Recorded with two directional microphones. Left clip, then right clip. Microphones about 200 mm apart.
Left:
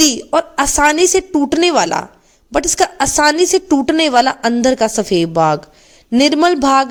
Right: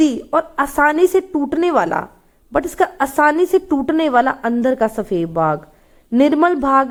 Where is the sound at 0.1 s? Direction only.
35° left (ahead or behind).